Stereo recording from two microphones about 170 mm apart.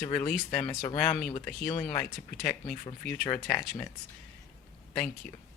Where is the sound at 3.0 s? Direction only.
5° left (ahead or behind).